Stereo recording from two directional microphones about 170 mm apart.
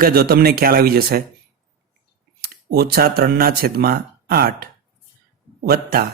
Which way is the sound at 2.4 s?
65° right (ahead or behind).